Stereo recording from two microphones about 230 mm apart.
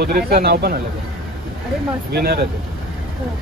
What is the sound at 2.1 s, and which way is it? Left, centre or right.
Speech, right.